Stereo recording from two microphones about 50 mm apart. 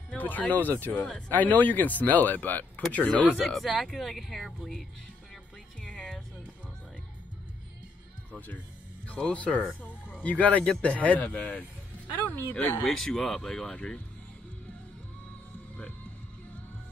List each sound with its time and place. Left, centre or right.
0.2 s speech: left
3.4 s speech: centre
5.8 s music: centre
8.3 s speech: left
9.0 s speech: left
12.8 s speech: centre